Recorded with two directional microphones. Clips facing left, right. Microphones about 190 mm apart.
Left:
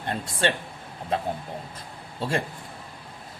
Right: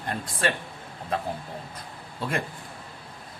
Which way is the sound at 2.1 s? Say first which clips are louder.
Left 2 dB; 30° left (ahead or behind).